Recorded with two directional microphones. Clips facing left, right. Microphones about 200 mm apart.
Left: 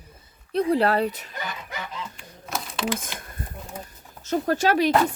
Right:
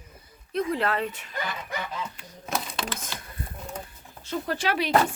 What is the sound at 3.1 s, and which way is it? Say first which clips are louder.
Speech: left 1 dB; 15° left (ahead or behind).